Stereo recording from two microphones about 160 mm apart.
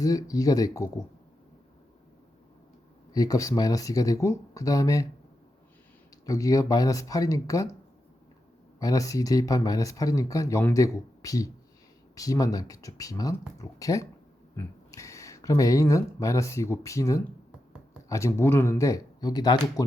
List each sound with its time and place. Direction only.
0.0 s speech: 20° left (ahead or behind)
3.1 s speech: 25° left (ahead or behind)
6.2 s speech: 20° left (ahead or behind)
8.8 s speech: 20° left (ahead or behind)